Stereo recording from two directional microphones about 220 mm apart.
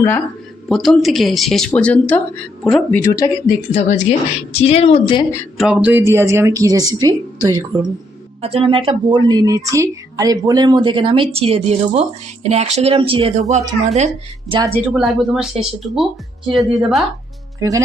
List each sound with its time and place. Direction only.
0.7 s speech: centre (ahead or behind)
3.0 s speech: 15° left (ahead or behind)
3.7 s a woman's voice: 30° left (ahead or behind)
5.5 s a woman's voice: 5° right (ahead or behind)
8.4 s a woman's voice: 25° right (ahead or behind)
14.7 s speech: centre (ahead or behind)
17.6 s a woman's voice: 15° right (ahead or behind)